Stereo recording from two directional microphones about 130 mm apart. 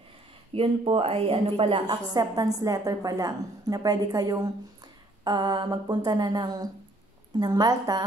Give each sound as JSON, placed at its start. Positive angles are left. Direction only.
{"t": 0.5, "sound": "speech", "side_deg": -45}
{"t": 2.1, "sound": "a woman's voice", "side_deg": -30}